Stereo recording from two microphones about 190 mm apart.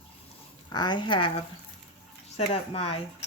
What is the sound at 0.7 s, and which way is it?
Speech, 20° left (ahead or behind).